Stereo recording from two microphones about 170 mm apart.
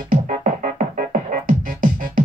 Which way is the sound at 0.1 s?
50° right (ahead or behind).